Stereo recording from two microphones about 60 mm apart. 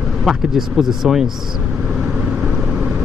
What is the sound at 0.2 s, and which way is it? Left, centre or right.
Speech, centre.